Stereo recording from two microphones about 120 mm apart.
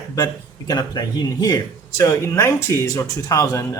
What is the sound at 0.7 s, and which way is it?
Speech, 35° left (ahead or behind).